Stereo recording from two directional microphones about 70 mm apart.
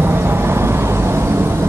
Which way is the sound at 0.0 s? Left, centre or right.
Right.